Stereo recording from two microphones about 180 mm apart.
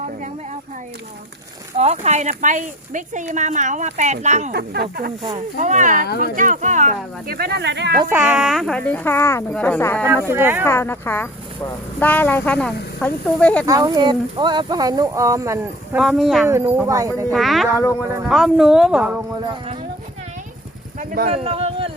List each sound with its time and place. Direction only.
1.8 s speech: 35° right (ahead or behind)
4.5 s speech: 60° right (ahead or behind)
5.5 s speech: 40° right (ahead or behind)
6.1 s speech: 60° left (ahead or behind)
6.3 s speech: 45° right (ahead or behind); by 7.9 s 75° right (ahead or behind)
8.1 s speech: 5° right (ahead or behind); by 10.1 s 10° left (ahead or behind)
10.2 s speech: 10° right (ahead or behind)
10.7 s speech: 15° left (ahead or behind)
13.7 s speech: 20° right (ahead or behind)
16.0 s speech: centre (ahead or behind)
16.5 s speech: 15° right (ahead or behind)
17.3 s speech: centre (ahead or behind)
21.0 s speech: 40° right (ahead or behind)